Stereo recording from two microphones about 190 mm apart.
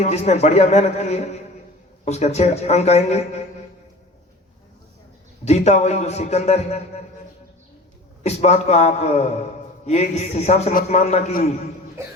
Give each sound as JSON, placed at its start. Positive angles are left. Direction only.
{"t": 0.0, "sound": "a man's voice", "side_deg": 35}
{"t": 5.5, "sound": "a man's voice", "side_deg": 35}
{"t": 8.2, "sound": "a man's voice", "side_deg": 35}